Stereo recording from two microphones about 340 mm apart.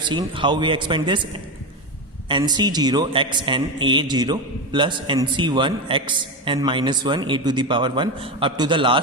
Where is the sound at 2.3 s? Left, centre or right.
Centre.